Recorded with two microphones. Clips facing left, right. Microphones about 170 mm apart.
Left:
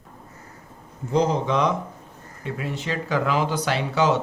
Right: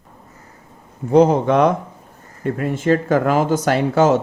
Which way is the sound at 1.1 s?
55° right (ahead or behind).